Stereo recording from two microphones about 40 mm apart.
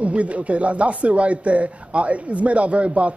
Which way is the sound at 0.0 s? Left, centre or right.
Right.